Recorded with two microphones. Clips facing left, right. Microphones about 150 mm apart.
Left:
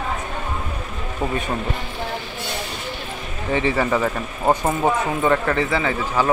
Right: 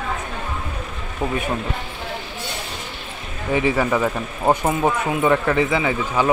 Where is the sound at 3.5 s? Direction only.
10° right (ahead or behind).